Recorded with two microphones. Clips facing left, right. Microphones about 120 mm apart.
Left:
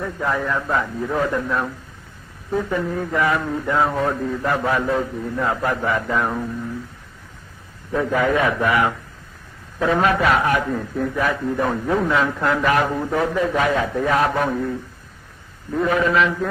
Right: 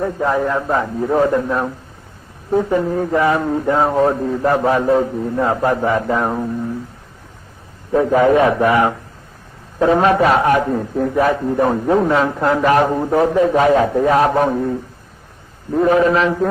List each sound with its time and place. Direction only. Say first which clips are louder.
0.0 s a man's voice: right 6 dB; 30° right (ahead or behind)
7.9 s a man's voice: right 7 dB; 30° right (ahead or behind)